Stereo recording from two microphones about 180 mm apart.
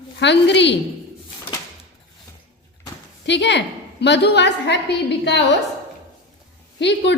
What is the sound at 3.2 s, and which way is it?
A woman's voice, 75° left (ahead or behind).